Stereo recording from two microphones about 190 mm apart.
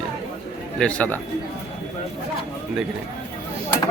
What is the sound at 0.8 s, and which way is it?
Speech, 5° left (ahead or behind).